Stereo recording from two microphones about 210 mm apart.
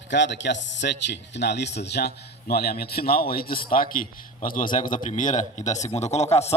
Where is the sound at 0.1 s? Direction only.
55° left (ahead or behind).